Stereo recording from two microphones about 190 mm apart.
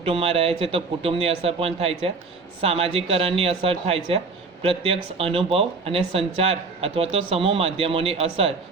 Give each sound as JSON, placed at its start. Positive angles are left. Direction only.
{"t": 0.0, "sound": "speech", "side_deg": -30}